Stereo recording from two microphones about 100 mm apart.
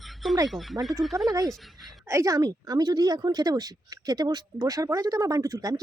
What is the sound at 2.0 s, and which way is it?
Speech, 30° right (ahead or behind).